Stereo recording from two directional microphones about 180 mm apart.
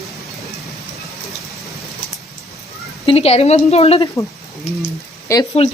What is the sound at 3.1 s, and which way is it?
A woman's voice, 35° left (ahead or behind).